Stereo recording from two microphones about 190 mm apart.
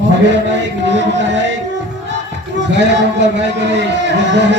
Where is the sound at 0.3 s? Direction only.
70° right (ahead or behind).